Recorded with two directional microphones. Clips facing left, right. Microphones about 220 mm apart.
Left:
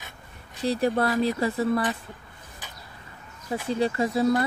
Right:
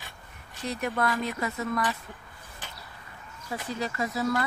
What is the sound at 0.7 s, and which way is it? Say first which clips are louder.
Speech: left 6 dB; 30° left (ahead or behind).